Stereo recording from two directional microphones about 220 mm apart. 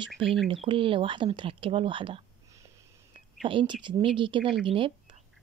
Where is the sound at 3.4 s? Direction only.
20° right (ahead or behind).